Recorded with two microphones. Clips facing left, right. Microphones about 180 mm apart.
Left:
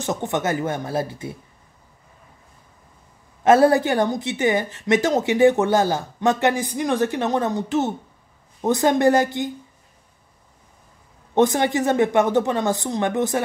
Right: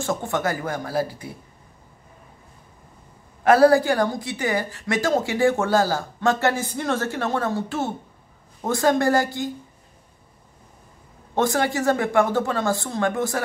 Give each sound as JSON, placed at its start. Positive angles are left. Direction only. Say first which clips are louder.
{"t": 0.0, "sound": "a woman's voice", "louder": "left 1 dB", "side_deg": 20}
{"t": 3.4, "sound": "a woman's voice", "louder": "even", "side_deg": 20}
{"t": 11.3, "sound": "a woman's voice", "louder": "left 4 dB", "side_deg": 20}